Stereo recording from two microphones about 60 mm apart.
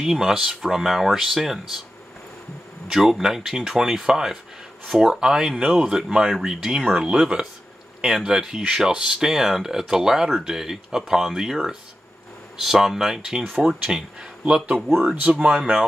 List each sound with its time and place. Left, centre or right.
0.0 s speech: centre
2.9 s speech: centre
14.4 s speech: right